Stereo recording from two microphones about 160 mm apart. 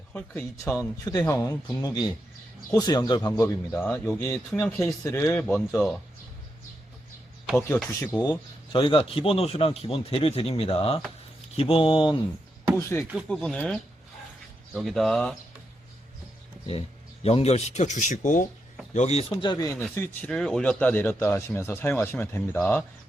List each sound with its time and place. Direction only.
0.1 s speech: 15° left (ahead or behind)
5.5 s speech: 5° left (ahead or behind)
7.9 s speech: 15° left (ahead or behind)
8.2 s speech: 30° left (ahead or behind)
12.7 s speech: 15° left (ahead or behind)
17.2 s speech: 40° left (ahead or behind)
18.9 s speech: 40° left (ahead or behind)
19.3 s speech: 25° left (ahead or behind)
20.0 s speech: 5° left (ahead or behind)